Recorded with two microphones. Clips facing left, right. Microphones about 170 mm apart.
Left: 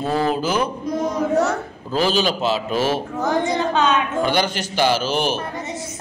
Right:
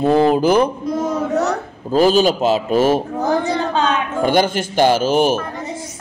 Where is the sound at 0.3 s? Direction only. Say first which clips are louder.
Right 7 dB; 55° right (ahead or behind).